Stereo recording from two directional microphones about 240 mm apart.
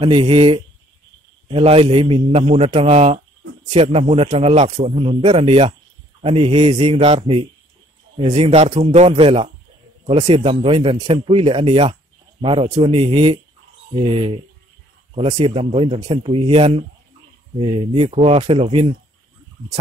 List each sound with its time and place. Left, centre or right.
0.0 s speech: right